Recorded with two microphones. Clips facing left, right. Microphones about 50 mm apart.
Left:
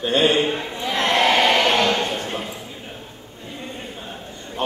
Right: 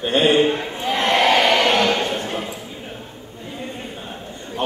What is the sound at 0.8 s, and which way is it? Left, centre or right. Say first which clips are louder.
Crowd: right 1 dB; right.